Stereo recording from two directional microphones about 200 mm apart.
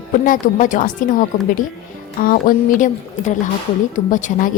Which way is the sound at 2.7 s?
40° left (ahead or behind).